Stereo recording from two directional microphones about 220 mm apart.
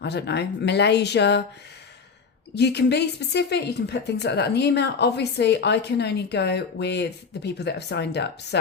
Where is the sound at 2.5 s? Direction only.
50° left (ahead or behind).